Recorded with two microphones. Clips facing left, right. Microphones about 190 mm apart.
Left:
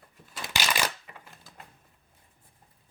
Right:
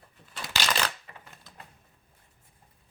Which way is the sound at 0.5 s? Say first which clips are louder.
Even; 15° left (ahead or behind).